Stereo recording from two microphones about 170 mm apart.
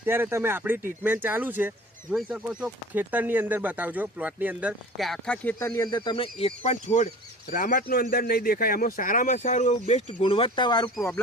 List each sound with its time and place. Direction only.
0.0 s speech: 15° right (ahead or behind)
4.9 s speech: centre (ahead or behind); by 10.9 s 25° left (ahead or behind)